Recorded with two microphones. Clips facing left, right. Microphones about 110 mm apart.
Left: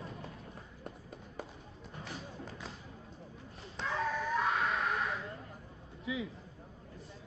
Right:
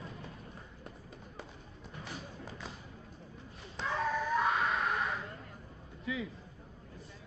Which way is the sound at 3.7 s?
Centre (ahead or behind).